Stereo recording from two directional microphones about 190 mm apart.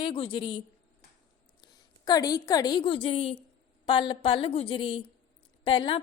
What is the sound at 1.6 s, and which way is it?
A woman's voice, 20° left (ahead or behind).